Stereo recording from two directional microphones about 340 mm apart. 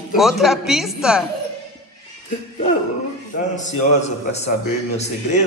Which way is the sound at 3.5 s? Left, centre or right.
Left.